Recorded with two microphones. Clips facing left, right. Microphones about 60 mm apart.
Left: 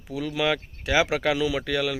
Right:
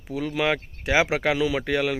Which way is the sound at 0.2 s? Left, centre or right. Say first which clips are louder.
Right 1 dB; centre.